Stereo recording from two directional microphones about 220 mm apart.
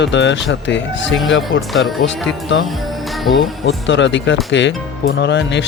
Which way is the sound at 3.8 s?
55° left (ahead or behind).